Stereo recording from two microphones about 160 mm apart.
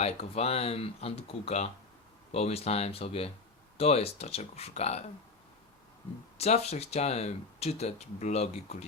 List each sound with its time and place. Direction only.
0.0 s speech: 40° left (ahead or behind)
6.3 s speech: 40° left (ahead or behind)